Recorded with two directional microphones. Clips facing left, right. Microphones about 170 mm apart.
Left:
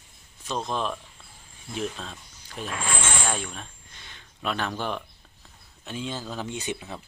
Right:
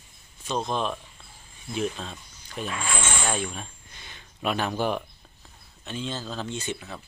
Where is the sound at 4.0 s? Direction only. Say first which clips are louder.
Right 3 dB; 10° right (ahead or behind).